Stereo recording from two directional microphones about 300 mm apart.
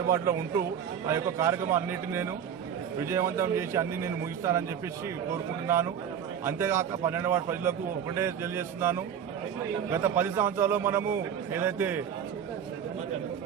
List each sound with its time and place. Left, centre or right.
0.1 s a man's voice: centre